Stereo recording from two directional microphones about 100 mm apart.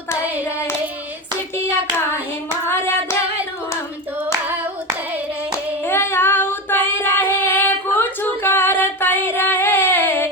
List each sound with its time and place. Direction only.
2.6 s singing: 25° left (ahead or behind)
5.8 s female singing: 25° left (ahead or behind)
9.3 s a sound: 20° left (ahead or behind)